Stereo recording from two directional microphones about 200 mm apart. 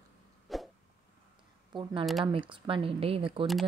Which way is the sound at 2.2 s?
25° right (ahead or behind).